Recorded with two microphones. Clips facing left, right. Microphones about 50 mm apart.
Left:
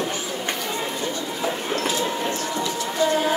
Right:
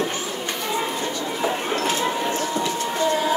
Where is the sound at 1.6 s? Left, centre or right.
Right.